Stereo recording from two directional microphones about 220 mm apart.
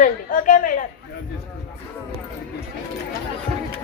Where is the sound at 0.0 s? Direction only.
35° left (ahead or behind).